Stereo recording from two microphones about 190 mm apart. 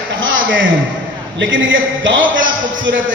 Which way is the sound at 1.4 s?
85° right.